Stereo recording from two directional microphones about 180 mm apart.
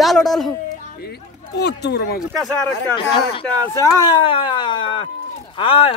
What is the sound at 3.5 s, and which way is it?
Speech, 20° left (ahead or behind).